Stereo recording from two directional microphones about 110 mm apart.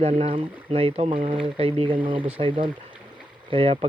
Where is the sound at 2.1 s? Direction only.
15° right (ahead or behind).